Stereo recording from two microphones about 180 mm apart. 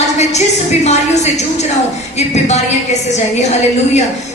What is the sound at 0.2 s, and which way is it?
A woman's voice, 40° left (ahead or behind).